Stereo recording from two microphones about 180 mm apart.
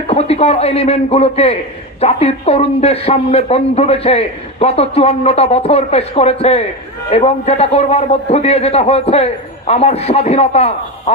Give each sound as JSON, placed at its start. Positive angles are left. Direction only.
{"t": 0.1, "sound": "a man's voice", "side_deg": 35}